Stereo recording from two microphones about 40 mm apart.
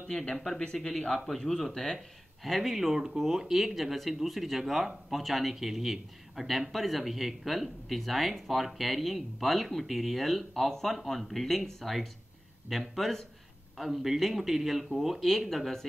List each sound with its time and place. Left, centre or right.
0.1 s a man's voice: left
2.4 s speech: centre
3.7 s speech: centre